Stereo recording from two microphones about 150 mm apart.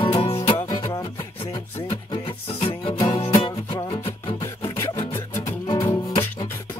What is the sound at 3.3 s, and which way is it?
Music, 30° left (ahead or behind).